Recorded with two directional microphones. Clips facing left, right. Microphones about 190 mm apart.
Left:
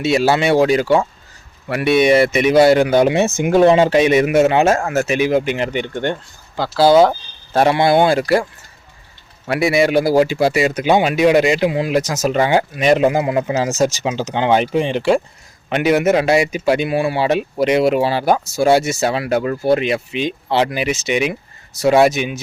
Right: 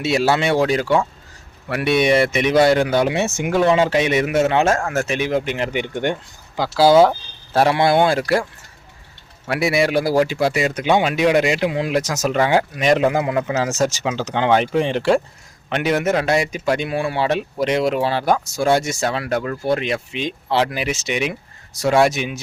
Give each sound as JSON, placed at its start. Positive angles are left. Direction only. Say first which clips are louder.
{"t": 0.0, "sound": "speech", "louder": "left 3 dB", "side_deg": 0}
{"t": 3.1, "sound": "speech", "louder": "left 5 dB", "side_deg": 20}
{"t": 4.0, "sound": "speech", "louder": "left 5 dB", "side_deg": 15}
{"t": 5.7, "sound": "speech", "louder": "left 1 dB", "side_deg": -10}
{"t": 7.1, "sound": "speech", "louder": "left 2 dB", "side_deg": 0}
{"t": 9.5, "sound": "speech", "louder": "left 3 dB", "side_deg": 0}
{"t": 13.0, "sound": "speech", "louder": "left 3 dB", "side_deg": 20}